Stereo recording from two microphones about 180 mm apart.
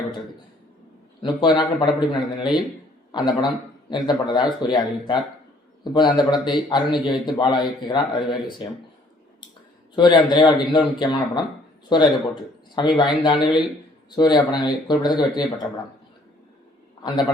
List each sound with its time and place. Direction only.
1.2 s a man's voice: 25° left (ahead or behind)
9.9 s a man's voice: 25° left (ahead or behind)